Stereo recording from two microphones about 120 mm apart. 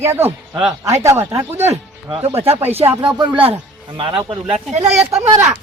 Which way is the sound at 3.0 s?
40° right (ahead or behind).